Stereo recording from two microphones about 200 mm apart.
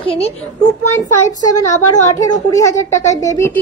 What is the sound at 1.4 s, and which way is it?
Speech, 20° left (ahead or behind).